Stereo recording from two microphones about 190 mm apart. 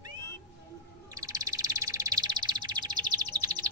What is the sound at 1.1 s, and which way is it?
Bird, 20° right (ahead or behind).